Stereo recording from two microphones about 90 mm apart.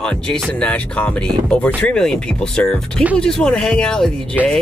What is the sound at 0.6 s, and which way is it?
Speech, 15° left (ahead or behind).